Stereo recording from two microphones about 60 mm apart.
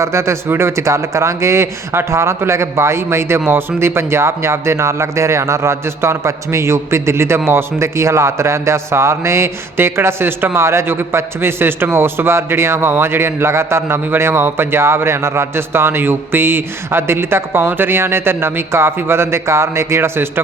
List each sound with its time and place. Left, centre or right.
0.0 s speech: right